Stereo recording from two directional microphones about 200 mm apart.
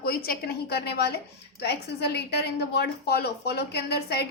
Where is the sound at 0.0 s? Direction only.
50° left (ahead or behind).